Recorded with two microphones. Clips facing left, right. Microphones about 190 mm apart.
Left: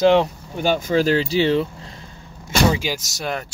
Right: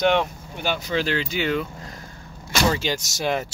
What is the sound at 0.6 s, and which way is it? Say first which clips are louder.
Speech: left 6 dB; 45° left (ahead or behind).